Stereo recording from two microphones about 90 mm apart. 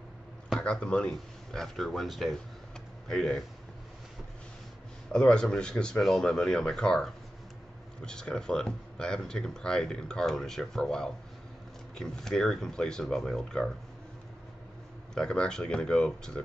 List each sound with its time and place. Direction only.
0.6 s speech: 10° left (ahead or behind)
5.1 s speech: 10° left (ahead or behind)
15.1 s speech: 10° left (ahead or behind)